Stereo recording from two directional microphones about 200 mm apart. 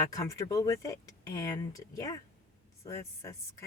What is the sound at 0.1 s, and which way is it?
Speech, 15° left (ahead or behind).